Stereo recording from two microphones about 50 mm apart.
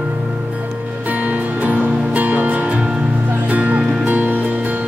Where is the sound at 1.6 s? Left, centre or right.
Right.